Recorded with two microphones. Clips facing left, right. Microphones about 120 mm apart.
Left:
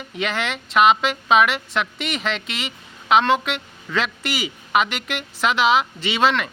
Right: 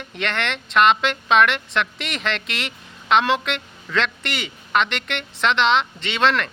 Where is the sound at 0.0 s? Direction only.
5° left (ahead or behind).